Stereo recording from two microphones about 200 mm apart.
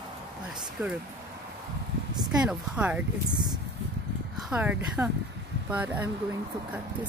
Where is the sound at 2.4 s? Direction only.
5° right (ahead or behind).